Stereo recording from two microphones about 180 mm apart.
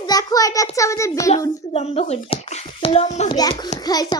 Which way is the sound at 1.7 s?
35° left (ahead or behind).